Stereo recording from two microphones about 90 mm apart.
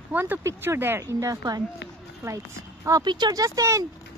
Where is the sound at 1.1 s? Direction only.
40° right (ahead or behind).